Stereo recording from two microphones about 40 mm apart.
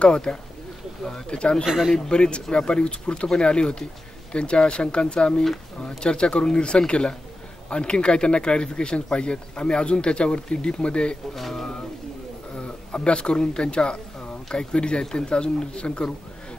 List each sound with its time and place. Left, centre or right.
0.0 s speech: left
11.3 s speech: centre
12.5 s speech: left